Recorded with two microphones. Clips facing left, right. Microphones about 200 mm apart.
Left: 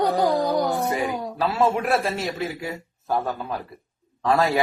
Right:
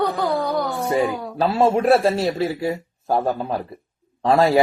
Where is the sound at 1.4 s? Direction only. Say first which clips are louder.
Right 5 dB; 30° right (ahead or behind).